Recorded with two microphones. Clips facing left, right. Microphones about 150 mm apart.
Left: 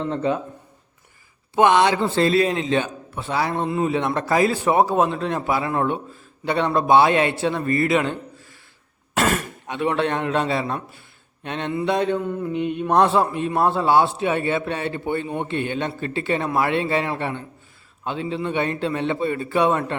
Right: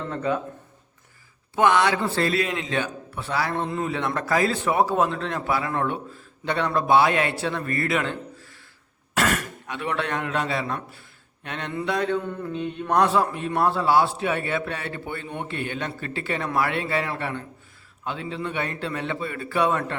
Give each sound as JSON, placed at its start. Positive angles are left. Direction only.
{"t": 0.1, "sound": "a man's voice", "side_deg": 25}
{"t": 1.5, "sound": "a man's voice", "side_deg": 20}
{"t": 11.9, "sound": "mantra", "side_deg": 20}
{"t": 13.0, "sound": "a man's voice", "side_deg": 25}